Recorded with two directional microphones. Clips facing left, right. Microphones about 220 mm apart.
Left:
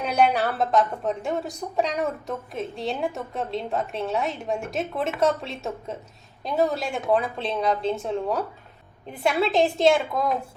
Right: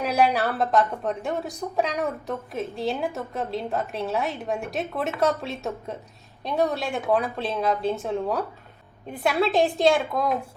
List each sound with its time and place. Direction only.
0.0 s a woman's voice: centre (ahead or behind)